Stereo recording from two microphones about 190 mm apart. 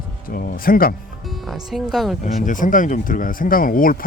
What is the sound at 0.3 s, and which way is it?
Speech, 50° left (ahead or behind).